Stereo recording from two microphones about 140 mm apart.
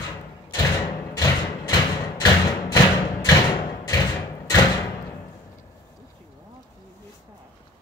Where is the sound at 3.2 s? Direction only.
25° left (ahead or behind).